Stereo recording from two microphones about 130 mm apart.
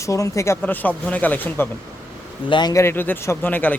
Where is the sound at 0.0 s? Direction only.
25° left (ahead or behind).